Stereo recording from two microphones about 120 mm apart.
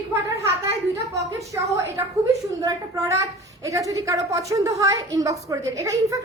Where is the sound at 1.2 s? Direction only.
25° right (ahead or behind).